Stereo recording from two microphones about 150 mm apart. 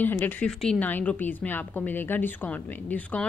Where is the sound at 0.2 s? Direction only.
5° left (ahead or behind).